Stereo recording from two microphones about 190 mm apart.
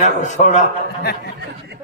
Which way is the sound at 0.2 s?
40° left (ahead or behind).